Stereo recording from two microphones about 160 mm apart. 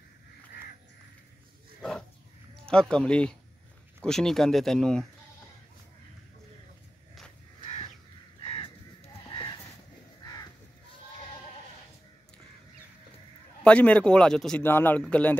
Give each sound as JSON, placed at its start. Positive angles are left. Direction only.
{"t": 1.8, "sound": "dog", "side_deg": 5}
{"t": 2.7, "sound": "speech", "side_deg": 5}
{"t": 8.4, "sound": "crow", "side_deg": 35}
{"t": 13.7, "sound": "speech", "side_deg": 10}